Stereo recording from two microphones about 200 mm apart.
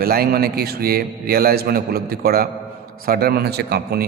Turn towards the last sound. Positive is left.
turn(degrees=-55)  # may be behind; listen again after turning